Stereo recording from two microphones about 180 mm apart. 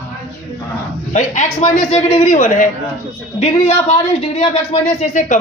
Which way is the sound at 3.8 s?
40° left (ahead or behind).